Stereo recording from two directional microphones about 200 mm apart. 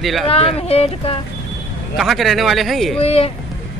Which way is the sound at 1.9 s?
Centre (ahead or behind).